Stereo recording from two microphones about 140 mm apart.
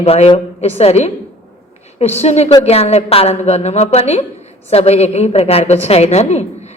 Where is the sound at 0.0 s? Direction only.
45° left (ahead or behind).